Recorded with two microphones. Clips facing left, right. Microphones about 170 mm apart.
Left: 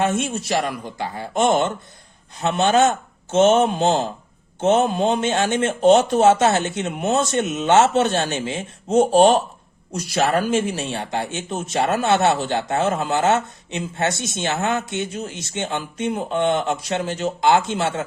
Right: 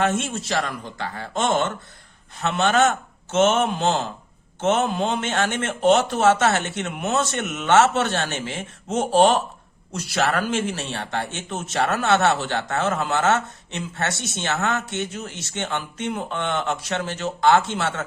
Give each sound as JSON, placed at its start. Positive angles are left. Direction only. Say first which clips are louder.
{"t": 0.0, "sound": "a man's voice", "louder": "left 2 dB", "side_deg": 15}